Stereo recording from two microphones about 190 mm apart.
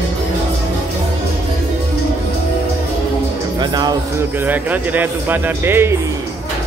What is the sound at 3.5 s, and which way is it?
Music, 20° right (ahead or behind).